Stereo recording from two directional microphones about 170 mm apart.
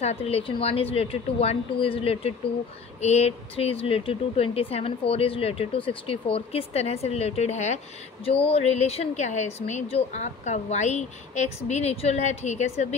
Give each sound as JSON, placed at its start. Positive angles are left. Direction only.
{"t": 0.0, "sound": "speech", "side_deg": 35}